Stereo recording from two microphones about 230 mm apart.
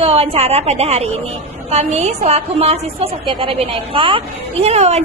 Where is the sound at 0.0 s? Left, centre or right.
Right.